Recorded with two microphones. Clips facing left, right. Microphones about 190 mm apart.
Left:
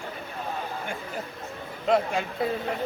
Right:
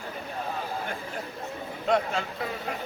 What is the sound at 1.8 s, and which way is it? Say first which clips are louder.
Speech: left 2 dB; 5° left (ahead or behind).